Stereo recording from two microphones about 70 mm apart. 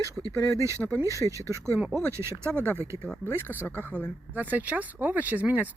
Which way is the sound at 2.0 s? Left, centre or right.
Right.